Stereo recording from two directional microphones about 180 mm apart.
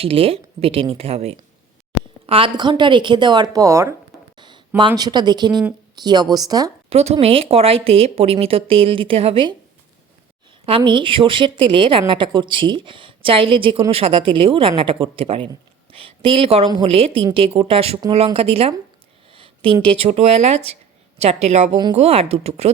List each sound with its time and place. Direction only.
0.0 s a woman's voice: 30° right (ahead or behind)
4.4 s a sound: 25° right (ahead or behind)
4.9 s a woman's voice: 25° right (ahead or behind)
6.9 s speech: 35° right (ahead or behind)
10.7 s a woman's voice: 25° right (ahead or behind)